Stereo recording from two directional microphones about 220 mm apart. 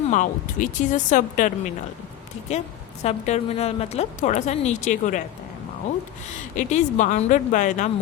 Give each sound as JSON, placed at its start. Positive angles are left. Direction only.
{"t": 0.1, "sound": "a woman's voice", "side_deg": 35}
{"t": 3.0, "sound": "a woman's voice", "side_deg": 30}
{"t": 6.6, "sound": "a woman's voice", "side_deg": 30}